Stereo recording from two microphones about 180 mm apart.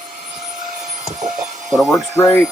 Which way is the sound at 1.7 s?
Centre (ahead or behind).